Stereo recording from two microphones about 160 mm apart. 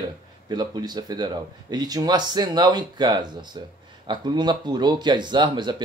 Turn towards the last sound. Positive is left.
turn(degrees=-30)  # may be behind; listen again after turning